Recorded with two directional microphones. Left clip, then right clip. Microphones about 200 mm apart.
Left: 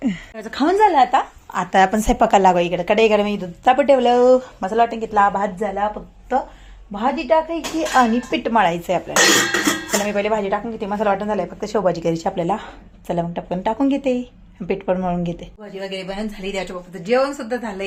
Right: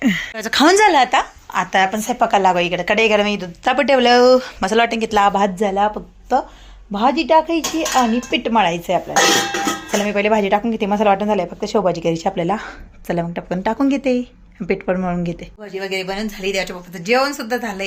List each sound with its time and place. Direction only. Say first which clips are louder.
0.0 s a woman's voice: right 7 dB; centre (ahead or behind)
1.7 s a woman's voice: left 3 dB; 30° left (ahead or behind)
2.6 s speech: even; 10° left (ahead or behind)
5.4 s speech: right 5 dB; 40° right (ahead or behind)
7.8 s speech: left 3 dB; 10° right (ahead or behind)